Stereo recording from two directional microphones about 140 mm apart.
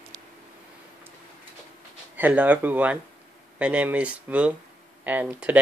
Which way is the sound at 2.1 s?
10° right (ahead or behind).